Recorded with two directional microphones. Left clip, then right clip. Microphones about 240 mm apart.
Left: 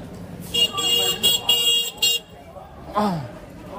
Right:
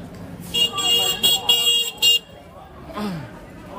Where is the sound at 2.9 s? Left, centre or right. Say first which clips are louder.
Left 8 dB; centre.